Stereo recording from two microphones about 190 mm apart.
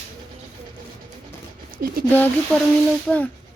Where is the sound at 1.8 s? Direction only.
50° right (ahead or behind).